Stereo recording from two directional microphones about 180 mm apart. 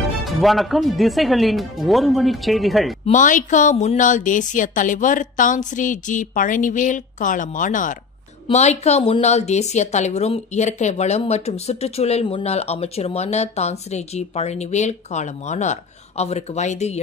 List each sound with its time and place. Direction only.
0.2 s speech: centre (ahead or behind)
3.1 s a woman's voice: 45° left (ahead or behind)